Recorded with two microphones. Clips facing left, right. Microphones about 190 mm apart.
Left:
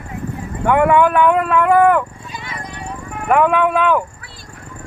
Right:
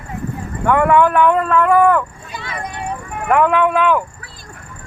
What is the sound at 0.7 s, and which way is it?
Speech, 15° left (ahead or behind).